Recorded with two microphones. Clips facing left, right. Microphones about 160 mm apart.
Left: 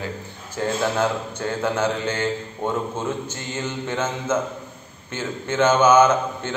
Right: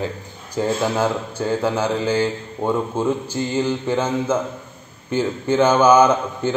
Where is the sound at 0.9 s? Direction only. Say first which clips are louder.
Right 2 dB; 10° right (ahead or behind).